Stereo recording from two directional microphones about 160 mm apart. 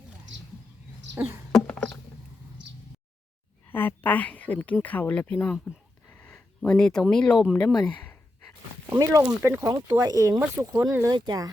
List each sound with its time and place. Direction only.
1.1 s a sound: 15° right (ahead or behind)
1.5 s mouse: 5° left (ahead or behind)
3.7 s speech: 10° left (ahead or behind)
6.1 s a sound: 5° left (ahead or behind)
7.0 s speech: 5° left (ahead or behind)
8.9 s speech: 20° right (ahead or behind)